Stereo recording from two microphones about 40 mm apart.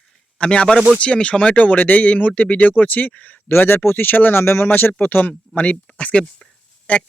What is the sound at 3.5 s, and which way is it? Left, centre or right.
Speech, left.